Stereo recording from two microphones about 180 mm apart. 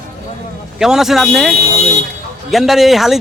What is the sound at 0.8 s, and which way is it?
Speech, centre (ahead or behind).